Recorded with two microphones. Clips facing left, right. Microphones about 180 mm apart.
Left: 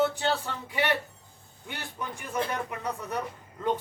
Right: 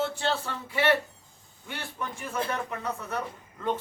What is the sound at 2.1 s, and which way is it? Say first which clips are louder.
A man's voice: left 1 dB; 15° left (ahead or behind).